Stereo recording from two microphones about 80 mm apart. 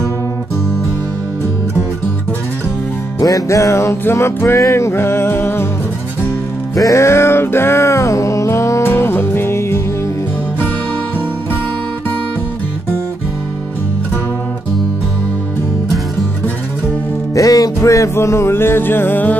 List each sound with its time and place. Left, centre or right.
3.2 s music: left
6.7 s music: left
17.4 s music: left